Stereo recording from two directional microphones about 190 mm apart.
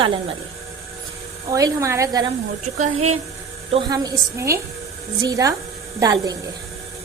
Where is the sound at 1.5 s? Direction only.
15° right (ahead or behind).